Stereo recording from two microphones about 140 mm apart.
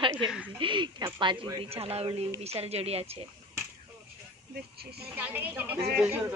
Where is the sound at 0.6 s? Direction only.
35° right (ahead or behind).